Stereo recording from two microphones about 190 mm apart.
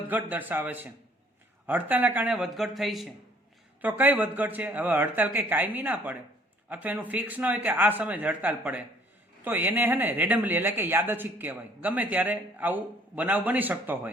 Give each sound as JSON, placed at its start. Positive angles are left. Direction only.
{"t": 0.1, "sound": "speech", "side_deg": -10}